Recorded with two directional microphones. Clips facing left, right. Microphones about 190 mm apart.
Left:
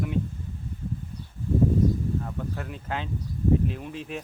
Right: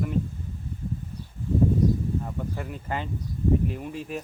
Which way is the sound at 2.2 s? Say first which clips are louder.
Right 1 dB; 10° right (ahead or behind).